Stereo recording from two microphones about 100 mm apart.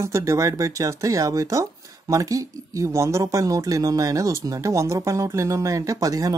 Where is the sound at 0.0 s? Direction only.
30° right (ahead or behind).